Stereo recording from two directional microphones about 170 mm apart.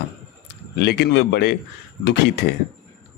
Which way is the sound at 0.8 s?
75° left (ahead or behind).